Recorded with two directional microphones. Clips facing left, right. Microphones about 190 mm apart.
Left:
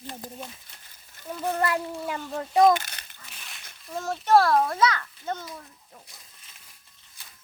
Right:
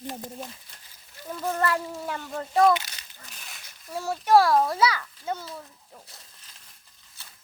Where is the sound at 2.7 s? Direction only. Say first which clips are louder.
Even; 55° left (ahead or behind).